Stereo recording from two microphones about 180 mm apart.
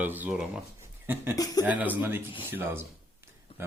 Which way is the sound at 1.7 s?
10° right (ahead or behind).